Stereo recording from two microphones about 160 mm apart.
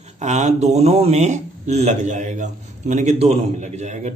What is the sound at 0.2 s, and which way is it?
Speech, 45° right (ahead or behind).